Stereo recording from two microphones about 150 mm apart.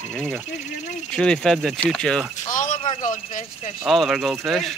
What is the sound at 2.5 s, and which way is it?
Speech, 60° left (ahead or behind).